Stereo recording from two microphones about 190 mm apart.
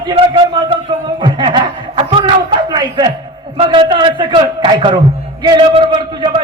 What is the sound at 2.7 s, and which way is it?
A man's voice, 20° right (ahead or behind).